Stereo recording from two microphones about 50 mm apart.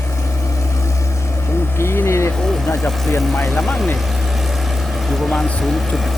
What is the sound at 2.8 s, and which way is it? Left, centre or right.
Speech, centre.